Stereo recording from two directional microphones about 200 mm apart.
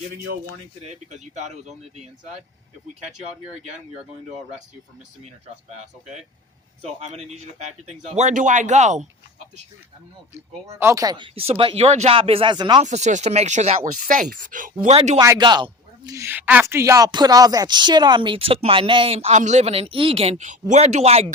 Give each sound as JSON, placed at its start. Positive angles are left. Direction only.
{"t": 0.9, "sound": "speech", "side_deg": -35}
{"t": 5.7, "sound": "speech", "side_deg": -35}
{"t": 10.8, "sound": "speech", "side_deg": -15}
{"t": 12.8, "sound": "speech", "side_deg": -35}
{"t": 15.2, "sound": "speech", "side_deg": -20}